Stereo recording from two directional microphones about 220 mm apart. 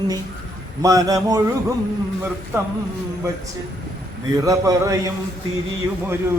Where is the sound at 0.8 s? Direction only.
15° right (ahead or behind).